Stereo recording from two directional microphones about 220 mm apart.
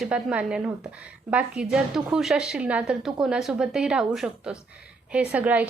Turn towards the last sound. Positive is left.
turn(degrees=-5)  # may be behind; listen again after turning